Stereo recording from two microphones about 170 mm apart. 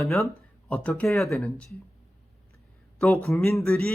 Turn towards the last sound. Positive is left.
turn(degrees=10)  # may be behind; listen again after turning